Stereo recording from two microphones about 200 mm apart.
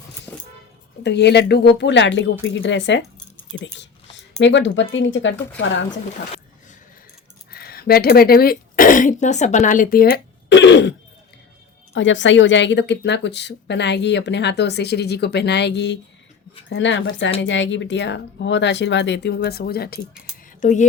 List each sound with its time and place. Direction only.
1.0 s speech: 55° left (ahead or behind)
7.5 s speech: 50° left (ahead or behind)
11.9 s speech: 65° left (ahead or behind); by 20.8 s 40° left (ahead or behind)